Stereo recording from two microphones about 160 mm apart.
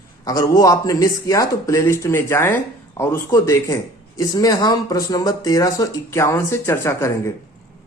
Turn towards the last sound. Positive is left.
turn(degrees=15)  # may be behind; listen again after turning